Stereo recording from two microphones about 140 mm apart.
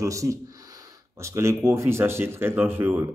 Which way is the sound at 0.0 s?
20° right (ahead or behind).